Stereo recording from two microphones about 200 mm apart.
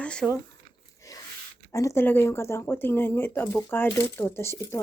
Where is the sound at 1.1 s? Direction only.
15° left (ahead or behind).